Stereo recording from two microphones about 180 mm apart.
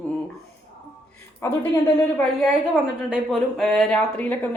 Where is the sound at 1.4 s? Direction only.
15° left (ahead or behind).